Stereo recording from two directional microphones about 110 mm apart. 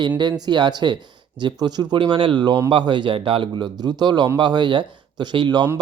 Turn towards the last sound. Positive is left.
turn(degrees=-40)  # may be behind; listen again after turning